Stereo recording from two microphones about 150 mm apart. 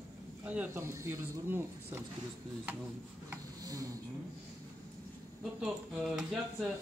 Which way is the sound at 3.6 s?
25° right (ahead or behind).